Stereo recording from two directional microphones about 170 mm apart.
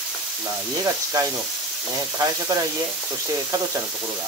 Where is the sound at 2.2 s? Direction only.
20° right (ahead or behind).